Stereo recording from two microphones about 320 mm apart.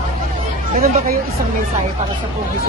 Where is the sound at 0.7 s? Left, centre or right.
Right.